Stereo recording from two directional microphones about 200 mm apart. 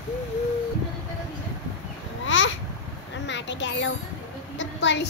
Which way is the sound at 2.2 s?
70° left (ahead or behind).